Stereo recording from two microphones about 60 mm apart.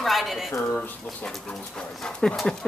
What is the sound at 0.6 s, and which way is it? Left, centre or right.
Speech, left.